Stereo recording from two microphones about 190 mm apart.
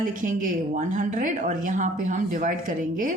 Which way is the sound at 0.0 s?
45° right (ahead or behind).